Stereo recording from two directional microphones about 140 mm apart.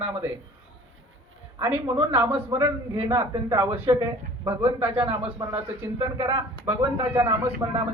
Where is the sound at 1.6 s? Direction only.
20° right (ahead or behind).